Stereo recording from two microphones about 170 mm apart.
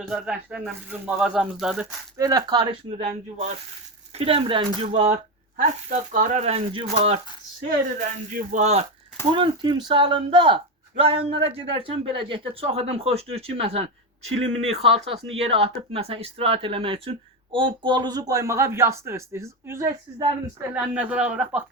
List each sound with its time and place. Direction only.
0.0 s speech: centre (ahead or behind)
2.1 s speech: 20° right (ahead or behind)
2.9 s speech: 40° right (ahead or behind)
9.3 s a man's voice: 30° right (ahead or behind); by 21.6 s 5° right (ahead or behind)